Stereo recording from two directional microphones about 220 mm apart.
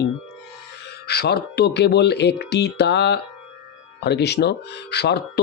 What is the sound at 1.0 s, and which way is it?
A man's voice, 45° left (ahead or behind).